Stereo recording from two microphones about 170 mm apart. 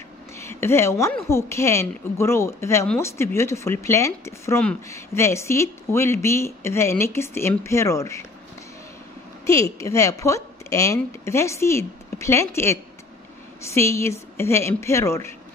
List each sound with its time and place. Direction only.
0.4 s speech: 15° left (ahead or behind)
9.5 s speech: 20° left (ahead or behind)